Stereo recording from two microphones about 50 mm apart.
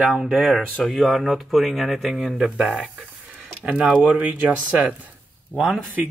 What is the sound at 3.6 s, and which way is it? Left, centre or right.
Speech, right.